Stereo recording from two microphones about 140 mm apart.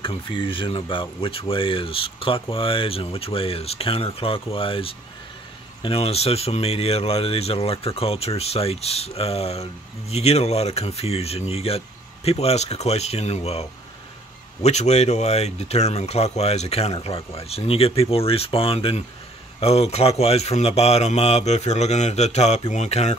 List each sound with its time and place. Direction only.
0.0 s speech: 40° left (ahead or behind)